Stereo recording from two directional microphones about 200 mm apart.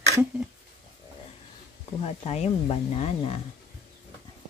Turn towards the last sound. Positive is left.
turn(degrees=30)  # may be behind; listen again after turning